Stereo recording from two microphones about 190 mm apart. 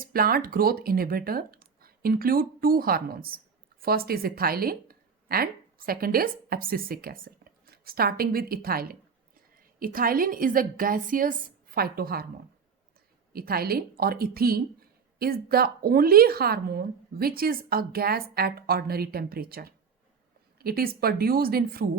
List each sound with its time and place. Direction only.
0.0 s speech: 50° right (ahead or behind)
13.3 s speech: 50° right (ahead or behind)